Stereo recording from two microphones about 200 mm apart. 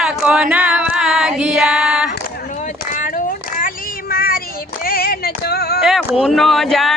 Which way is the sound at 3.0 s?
40° left (ahead or behind).